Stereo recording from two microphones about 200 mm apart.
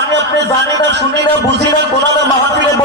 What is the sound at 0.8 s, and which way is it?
Music, 60° right (ahead or behind).